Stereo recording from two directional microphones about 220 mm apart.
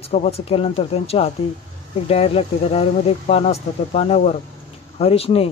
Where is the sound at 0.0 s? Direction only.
30° left (ahead or behind).